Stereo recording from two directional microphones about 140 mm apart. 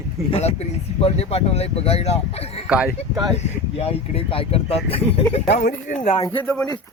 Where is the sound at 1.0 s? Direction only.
45° left (ahead or behind).